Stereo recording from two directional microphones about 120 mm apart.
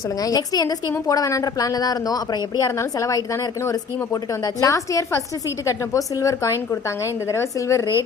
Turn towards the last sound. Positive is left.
turn(degrees=25)  # may be behind; listen again after turning